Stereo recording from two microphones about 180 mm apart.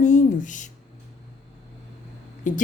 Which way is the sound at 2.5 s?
45° left (ahead or behind).